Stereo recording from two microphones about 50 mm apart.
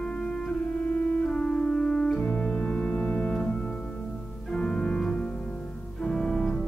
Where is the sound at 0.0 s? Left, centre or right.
Centre.